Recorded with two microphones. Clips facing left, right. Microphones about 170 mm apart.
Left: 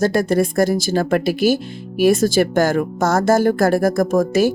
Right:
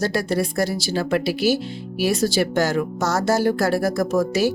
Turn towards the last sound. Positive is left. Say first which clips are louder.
# left 4 dB
turn(degrees=50)  # may be behind; listen again after turning